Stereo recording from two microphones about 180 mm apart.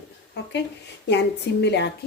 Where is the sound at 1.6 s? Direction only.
70° left (ahead or behind).